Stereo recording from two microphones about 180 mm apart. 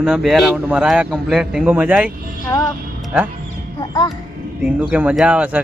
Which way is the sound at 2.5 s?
20° left (ahead or behind).